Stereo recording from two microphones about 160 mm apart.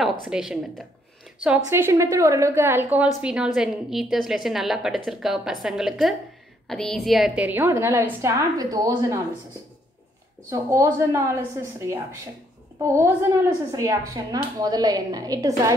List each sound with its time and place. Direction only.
0.2 s a woman's voice: 5° right (ahead or behind); by 9.2 s 20° right (ahead or behind)
10.5 s a woman's voice: 20° right (ahead or behind)